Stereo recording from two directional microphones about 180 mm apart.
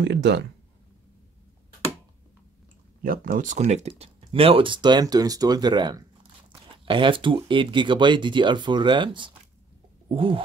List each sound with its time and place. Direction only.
0.0 s speech: 70° right (ahead or behind)
3.0 s speech: 50° right (ahead or behind); by 9.3 s 25° right (ahead or behind)
10.0 s a sound: 30° right (ahead or behind)